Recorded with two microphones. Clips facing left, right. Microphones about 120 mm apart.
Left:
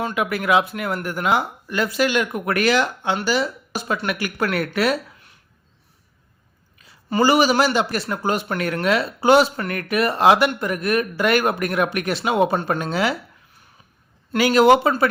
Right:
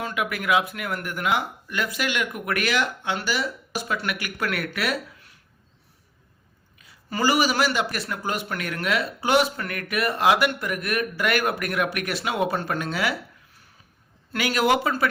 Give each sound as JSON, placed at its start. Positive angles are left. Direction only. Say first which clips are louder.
{"t": 0.0, "sound": "speech", "louder": "left 5 dB", "side_deg": 30}
{"t": 7.1, "sound": "speech", "louder": "left 6 dB", "side_deg": 30}
{"t": 14.3, "sound": "speech", "louder": "left 8 dB", "side_deg": 30}